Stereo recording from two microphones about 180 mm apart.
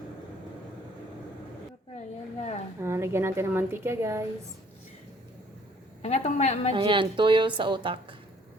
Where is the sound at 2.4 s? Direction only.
40° left (ahead or behind).